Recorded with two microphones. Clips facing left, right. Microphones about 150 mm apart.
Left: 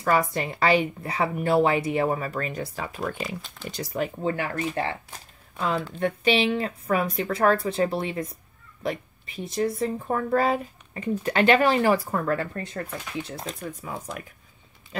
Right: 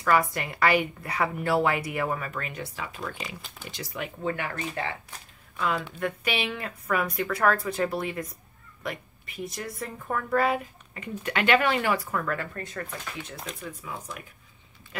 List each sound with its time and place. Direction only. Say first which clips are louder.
0.0 s a woman's voice: left 1 dB; 30° left (ahead or behind)
5.9 s a woman's voice: left 7 dB; 30° left (ahead or behind)